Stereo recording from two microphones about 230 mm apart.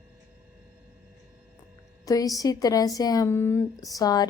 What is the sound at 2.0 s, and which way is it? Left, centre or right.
A woman's voice, centre.